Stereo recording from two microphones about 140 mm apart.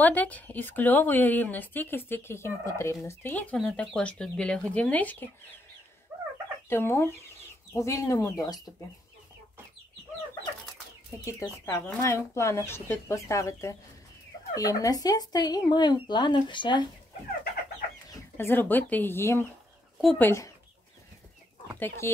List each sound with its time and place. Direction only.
0.0 s a woman's voice: 10° left (ahead or behind)
6.7 s a woman's voice: 15° left (ahead or behind)
11.2 s speech: 20° left (ahead or behind)
18.1 s speech: 15° left (ahead or behind)
21.7 s a woman's voice: 15° left (ahead or behind)